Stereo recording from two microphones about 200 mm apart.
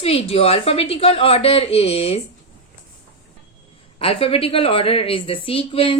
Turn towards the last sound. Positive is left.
turn(degrees=25)  # may be behind; listen again after turning